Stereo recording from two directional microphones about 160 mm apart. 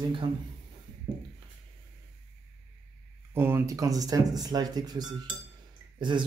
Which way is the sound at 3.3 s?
15° right (ahead or behind).